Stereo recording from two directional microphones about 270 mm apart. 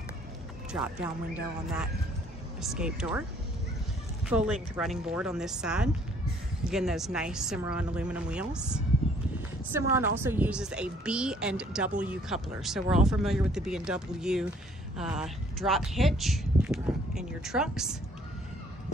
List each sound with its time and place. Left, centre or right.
2.6 s a woman's voice: centre
4.3 s a woman's voice: centre